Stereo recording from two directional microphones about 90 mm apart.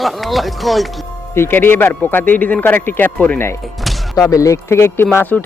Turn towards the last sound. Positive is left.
turn(degrees=20)  # may be behind; listen again after turning